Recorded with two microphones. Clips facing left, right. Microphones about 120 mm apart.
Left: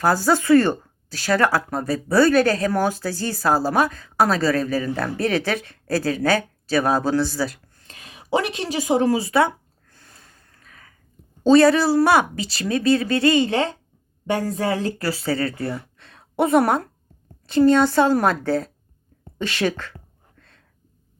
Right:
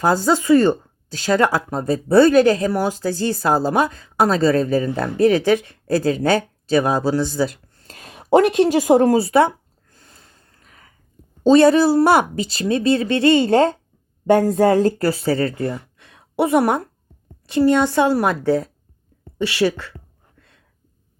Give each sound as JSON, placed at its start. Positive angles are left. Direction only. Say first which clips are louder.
{"t": 0.0, "sound": "speech", "louder": "right 2 dB", "side_deg": -20}
{"t": 7.9, "sound": "speech", "louder": "right 8 dB", "side_deg": -40}
{"t": 9.2, "sound": "speech", "louder": "right 4 dB", "side_deg": -30}
{"t": 10.5, "sound": "a sound", "louder": "left 2 dB", "side_deg": -25}
{"t": 11.4, "sound": "speech", "louder": "right 2 dB", "side_deg": -20}
{"t": 13.5, "sound": "speech", "louder": "right 7 dB", "side_deg": -45}
{"t": 15.1, "sound": "speech", "louder": "right 4 dB", "side_deg": -25}
{"t": 15.7, "sound": "a sound", "louder": "right 1 dB", "side_deg": -15}
{"t": 17.5, "sound": "a woman's voice", "louder": "even", "side_deg": -15}